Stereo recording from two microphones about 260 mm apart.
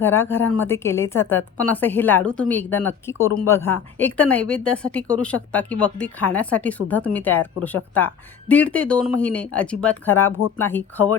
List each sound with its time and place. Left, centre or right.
0.0 s a woman's voice: centre